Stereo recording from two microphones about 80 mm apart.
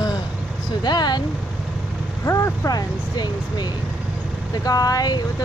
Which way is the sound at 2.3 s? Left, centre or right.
Left.